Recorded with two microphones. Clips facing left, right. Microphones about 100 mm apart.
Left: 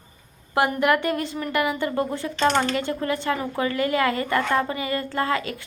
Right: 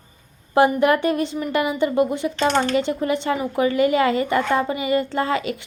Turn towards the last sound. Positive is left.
turn(degrees=-20)  # may be behind; listen again after turning